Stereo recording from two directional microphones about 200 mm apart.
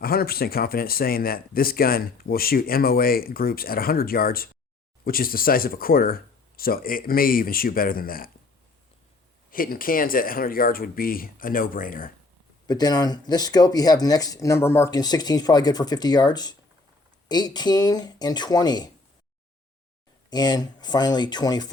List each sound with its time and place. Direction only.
0.0 s speech: 50° left (ahead or behind)
9.5 s speech: 45° left (ahead or behind)
12.6 s speech: 20° left (ahead or behind)
20.3 s speech: 20° left (ahead or behind)